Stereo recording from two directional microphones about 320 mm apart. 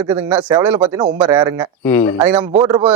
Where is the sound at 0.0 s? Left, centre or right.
Centre.